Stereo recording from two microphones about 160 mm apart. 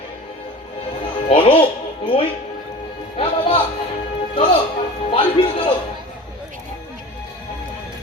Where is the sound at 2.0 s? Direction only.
35° left (ahead or behind).